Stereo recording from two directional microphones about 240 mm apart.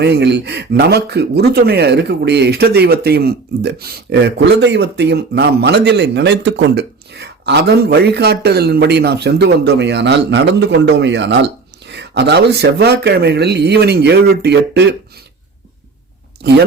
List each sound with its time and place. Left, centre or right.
0.0 s speech: right